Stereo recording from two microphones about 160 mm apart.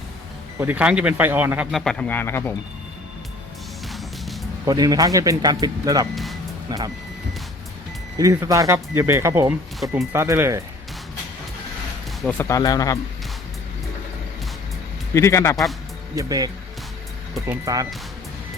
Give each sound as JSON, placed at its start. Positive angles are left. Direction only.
{"t": 0.6, "sound": "speech", "side_deg": -10}
{"t": 1.7, "sound": "speech", "side_deg": 5}
{"t": 3.8, "sound": "music", "side_deg": 0}
{"t": 4.6, "sound": "speech", "side_deg": -25}
{"t": 8.2, "sound": "speech", "side_deg": -20}
{"t": 12.2, "sound": "speech", "side_deg": 10}
{"t": 15.1, "sound": "speech", "side_deg": 20}
{"t": 16.1, "sound": "speech", "side_deg": -25}